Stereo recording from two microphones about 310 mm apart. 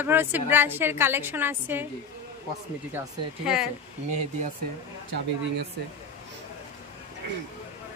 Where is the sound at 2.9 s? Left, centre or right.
Centre.